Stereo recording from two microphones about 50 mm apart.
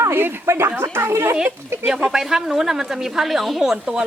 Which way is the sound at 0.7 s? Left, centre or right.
Right.